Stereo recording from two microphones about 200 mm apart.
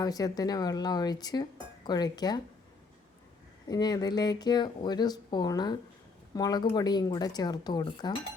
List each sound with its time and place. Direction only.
0.0 s speech: 20° left (ahead or behind)
3.7 s speech: 20° left (ahead or behind)